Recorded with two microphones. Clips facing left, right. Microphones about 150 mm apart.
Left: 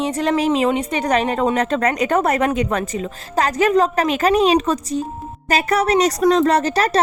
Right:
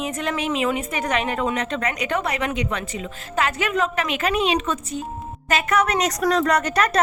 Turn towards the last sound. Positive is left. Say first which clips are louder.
# left 3 dB
turn(degrees=30)  # may be behind; listen again after turning